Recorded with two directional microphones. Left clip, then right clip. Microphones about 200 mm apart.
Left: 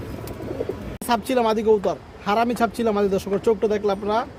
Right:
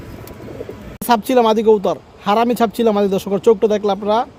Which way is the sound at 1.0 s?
50° right (ahead or behind).